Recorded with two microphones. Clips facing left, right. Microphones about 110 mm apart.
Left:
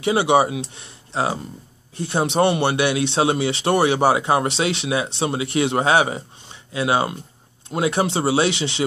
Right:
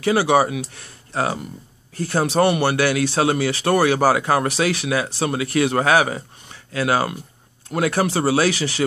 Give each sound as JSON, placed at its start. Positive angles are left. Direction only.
{"t": 0.0, "sound": "speech", "side_deg": 25}